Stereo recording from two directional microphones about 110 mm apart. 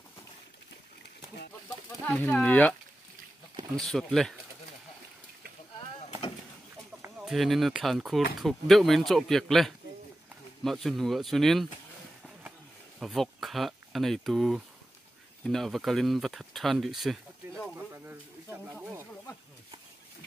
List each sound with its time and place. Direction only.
2.0 s speech: 15° left (ahead or behind)
3.7 s speech: 5° left (ahead or behind)
7.2 s speech: centre (ahead or behind)
13.0 s speech: centre (ahead or behind)
17.7 s a sound: 25° right (ahead or behind)